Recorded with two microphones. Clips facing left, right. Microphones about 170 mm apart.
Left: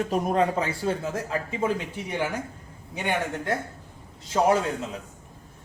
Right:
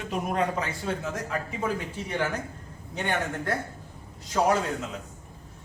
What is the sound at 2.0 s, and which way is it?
A man's voice, 15° left (ahead or behind).